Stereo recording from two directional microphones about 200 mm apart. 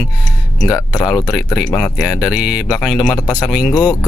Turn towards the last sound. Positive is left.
turn(degrees=20)  # may be behind; listen again after turning